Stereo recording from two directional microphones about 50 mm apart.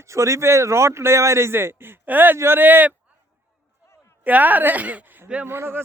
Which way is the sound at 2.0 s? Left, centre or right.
Right.